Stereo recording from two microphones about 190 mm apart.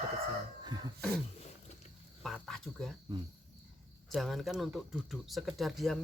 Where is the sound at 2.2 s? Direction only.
Centre (ahead or behind).